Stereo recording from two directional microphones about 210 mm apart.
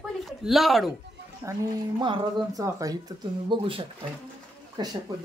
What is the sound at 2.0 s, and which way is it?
Speech, 20° right (ahead or behind).